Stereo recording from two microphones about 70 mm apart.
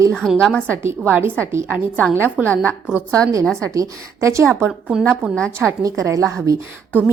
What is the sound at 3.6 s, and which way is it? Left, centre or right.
A woman's voice, right.